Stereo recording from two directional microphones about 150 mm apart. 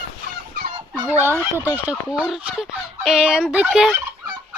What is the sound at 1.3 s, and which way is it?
Fowl, 15° right (ahead or behind).